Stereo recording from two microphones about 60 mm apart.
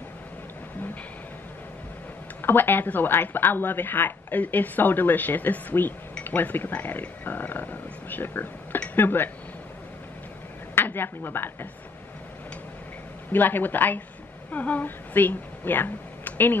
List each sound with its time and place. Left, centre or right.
2.4 s speech: left
10.7 s a woman's voice: left
13.3 s speech: left